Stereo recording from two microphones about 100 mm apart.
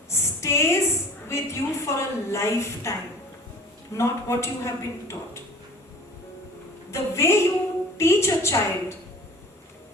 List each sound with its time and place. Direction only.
0.1 s a sound: 30° left (ahead or behind)
3.9 s a man's voice: 30° left (ahead or behind)
6.9 s a man's voice: 30° left (ahead or behind)